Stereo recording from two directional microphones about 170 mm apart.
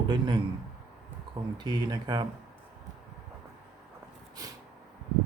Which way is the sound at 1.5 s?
25° right (ahead or behind).